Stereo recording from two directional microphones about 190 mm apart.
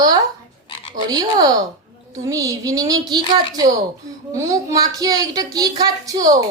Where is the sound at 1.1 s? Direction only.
20° right (ahead or behind).